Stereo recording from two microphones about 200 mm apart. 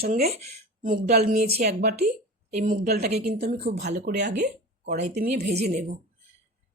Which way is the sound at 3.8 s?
55° right (ahead or behind).